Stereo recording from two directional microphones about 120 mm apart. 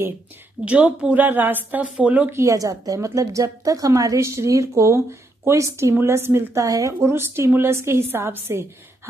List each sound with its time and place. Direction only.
0.7 s a woman's voice: 10° right (ahead or behind)
2.3 s a woman's voice: 25° right (ahead or behind)